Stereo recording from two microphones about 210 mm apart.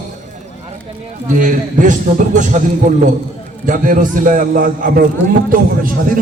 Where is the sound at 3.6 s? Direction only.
40° right (ahead or behind).